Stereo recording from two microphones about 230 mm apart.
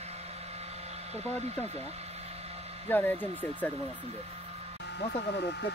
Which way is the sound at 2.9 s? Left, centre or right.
Centre.